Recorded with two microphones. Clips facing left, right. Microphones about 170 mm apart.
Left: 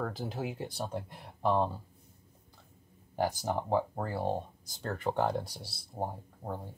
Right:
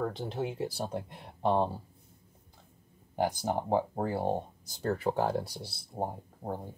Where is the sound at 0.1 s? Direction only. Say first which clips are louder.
Right 2 dB; centre (ahead or behind).